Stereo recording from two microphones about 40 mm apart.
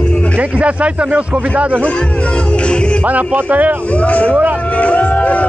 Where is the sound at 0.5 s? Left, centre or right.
Right.